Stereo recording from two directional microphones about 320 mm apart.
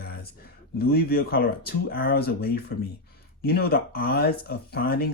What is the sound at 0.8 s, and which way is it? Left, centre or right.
Speech, left.